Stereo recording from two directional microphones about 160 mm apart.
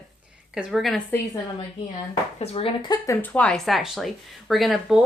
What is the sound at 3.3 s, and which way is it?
Speech, 5° left (ahead or behind).